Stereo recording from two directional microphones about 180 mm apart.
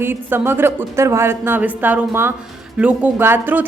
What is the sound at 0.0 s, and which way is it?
A woman's voice, 10° right (ahead or behind).